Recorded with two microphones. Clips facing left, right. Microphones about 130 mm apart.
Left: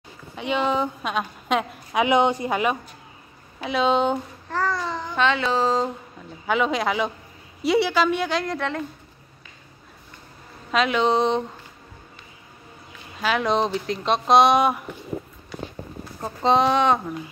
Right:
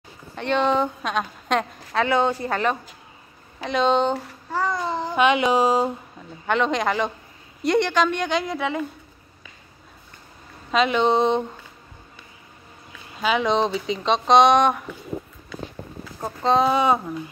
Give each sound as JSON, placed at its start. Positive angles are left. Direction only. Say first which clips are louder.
{"t": 0.4, "sound": "a woman's voice", "louder": "right 2 dB", "side_deg": 5}
{"t": 2.0, "sound": "a woman's voice", "louder": "left 2 dB", "side_deg": 15}
{"t": 4.7, "sound": "babbling", "louder": "right 3 dB", "side_deg": -25}
{"t": 5.1, "sound": "speech", "louder": "right 3 dB", "side_deg": -15}
{"t": 6.4, "sound": "a woman's voice", "louder": "right 1 dB", "side_deg": 5}
{"t": 10.7, "sound": "a woman's voice", "louder": "right 1 dB", "side_deg": 0}
{"t": 13.2, "sound": "a woman's voice", "louder": "right 1 dB", "side_deg": 0}
{"t": 16.2, "sound": "a woman's voice", "louder": "even", "side_deg": 0}